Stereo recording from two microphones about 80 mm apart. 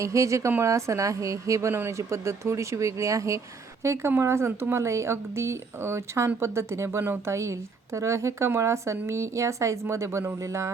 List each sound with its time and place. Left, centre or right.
0.0 s speech: right